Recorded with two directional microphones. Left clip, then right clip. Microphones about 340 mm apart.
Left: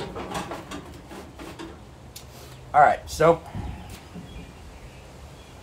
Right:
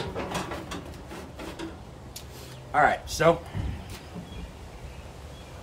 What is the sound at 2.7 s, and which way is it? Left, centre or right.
Speech, centre.